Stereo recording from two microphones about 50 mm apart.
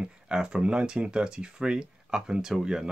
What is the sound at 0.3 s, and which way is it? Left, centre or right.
Speech, centre.